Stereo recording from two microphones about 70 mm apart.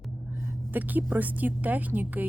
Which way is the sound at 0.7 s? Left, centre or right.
Right.